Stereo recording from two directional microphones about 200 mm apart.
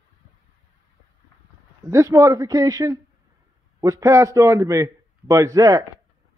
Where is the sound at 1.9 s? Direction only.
15° right (ahead or behind).